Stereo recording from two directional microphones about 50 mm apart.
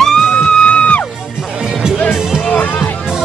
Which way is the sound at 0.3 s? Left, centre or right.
Left.